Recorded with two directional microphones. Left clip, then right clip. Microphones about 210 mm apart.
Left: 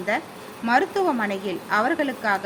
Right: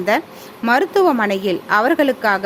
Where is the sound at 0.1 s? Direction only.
55° right (ahead or behind).